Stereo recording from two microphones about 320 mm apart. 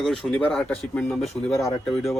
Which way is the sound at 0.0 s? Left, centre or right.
Centre.